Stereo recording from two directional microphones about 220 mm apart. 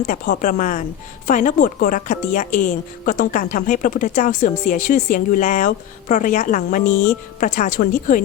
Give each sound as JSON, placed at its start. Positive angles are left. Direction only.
{"t": 0.1, "sound": "speech", "side_deg": 35}